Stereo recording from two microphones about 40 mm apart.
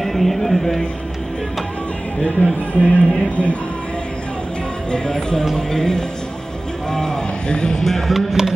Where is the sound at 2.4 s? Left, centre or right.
Left.